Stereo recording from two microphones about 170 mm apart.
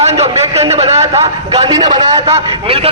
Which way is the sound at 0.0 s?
40° right (ahead or behind).